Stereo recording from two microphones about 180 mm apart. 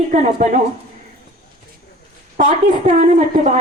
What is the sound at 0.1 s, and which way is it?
Speech, 45° right (ahead or behind).